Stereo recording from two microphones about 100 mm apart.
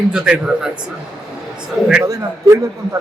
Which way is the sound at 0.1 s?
10° right (ahead or behind).